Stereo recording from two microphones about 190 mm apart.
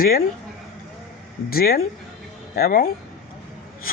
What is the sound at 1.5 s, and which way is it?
Speech, 50° left (ahead or behind).